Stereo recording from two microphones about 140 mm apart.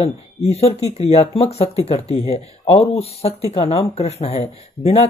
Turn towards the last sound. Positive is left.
turn(degrees=50)  # may be behind; listen again after turning